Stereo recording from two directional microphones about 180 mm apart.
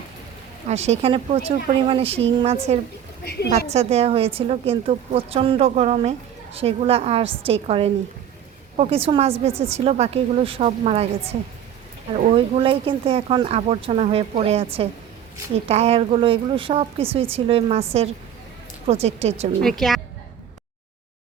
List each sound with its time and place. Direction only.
0.7 s a woman's voice: 35° right (ahead or behind)
19.0 s a woman's voice: 35° right (ahead or behind)
19.6 s a woman's voice: centre (ahead or behind)